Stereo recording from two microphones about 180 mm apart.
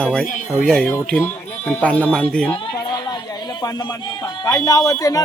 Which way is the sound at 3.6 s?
20° left (ahead or behind).